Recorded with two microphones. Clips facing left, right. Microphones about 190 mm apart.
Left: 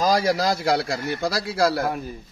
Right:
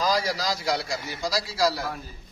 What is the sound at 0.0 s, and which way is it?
A man's voice, 50° left (ahead or behind).